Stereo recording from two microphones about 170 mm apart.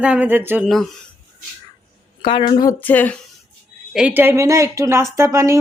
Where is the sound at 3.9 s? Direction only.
10° right (ahead or behind).